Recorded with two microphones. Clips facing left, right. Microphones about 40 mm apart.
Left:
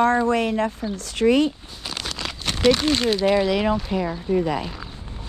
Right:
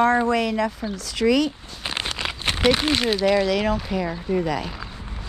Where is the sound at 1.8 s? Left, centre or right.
Right; by 3.1 s centre.